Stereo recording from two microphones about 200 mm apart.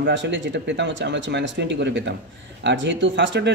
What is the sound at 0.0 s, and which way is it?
A man's voice, 65° right (ahead or behind).